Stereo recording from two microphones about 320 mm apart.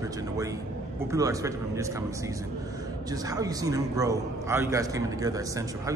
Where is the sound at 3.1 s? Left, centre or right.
Centre.